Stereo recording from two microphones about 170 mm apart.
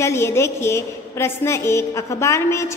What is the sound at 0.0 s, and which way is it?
A woman's voice, 15° left (ahead or behind).